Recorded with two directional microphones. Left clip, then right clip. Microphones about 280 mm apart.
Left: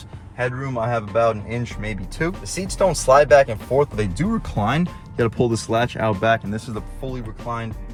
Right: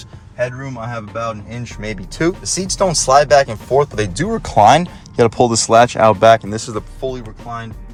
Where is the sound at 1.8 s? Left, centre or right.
Right.